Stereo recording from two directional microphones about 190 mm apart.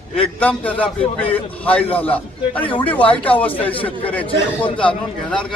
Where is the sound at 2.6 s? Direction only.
25° left (ahead or behind).